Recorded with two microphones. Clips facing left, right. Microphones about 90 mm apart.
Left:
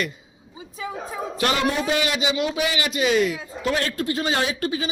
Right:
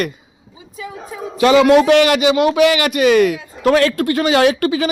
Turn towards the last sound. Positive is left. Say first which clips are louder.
# right 10 dB
turn(degrees=-75)  # may be behind; listen again after turning